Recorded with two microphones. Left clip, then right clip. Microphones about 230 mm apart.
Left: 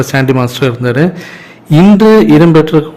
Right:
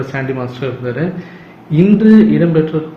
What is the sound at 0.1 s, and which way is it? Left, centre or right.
Speech, left.